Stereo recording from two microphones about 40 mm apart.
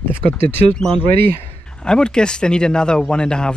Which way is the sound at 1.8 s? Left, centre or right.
Left.